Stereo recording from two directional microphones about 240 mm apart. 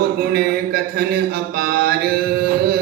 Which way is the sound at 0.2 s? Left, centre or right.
Right.